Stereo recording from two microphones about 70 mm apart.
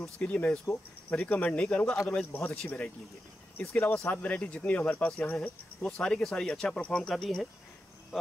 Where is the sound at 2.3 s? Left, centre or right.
Left.